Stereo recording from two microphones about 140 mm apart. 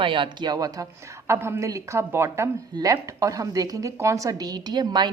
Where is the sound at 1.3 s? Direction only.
20° right (ahead or behind).